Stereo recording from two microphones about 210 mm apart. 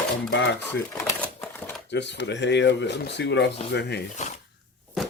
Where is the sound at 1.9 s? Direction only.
55° left (ahead or behind).